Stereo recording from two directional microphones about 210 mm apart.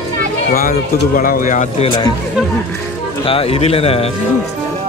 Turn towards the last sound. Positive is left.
turn(degrees=25)  # may be behind; listen again after turning